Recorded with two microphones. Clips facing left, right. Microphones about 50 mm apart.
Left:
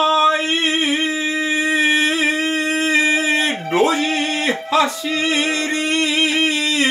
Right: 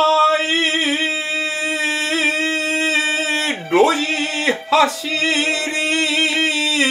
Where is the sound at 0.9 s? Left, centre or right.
Left.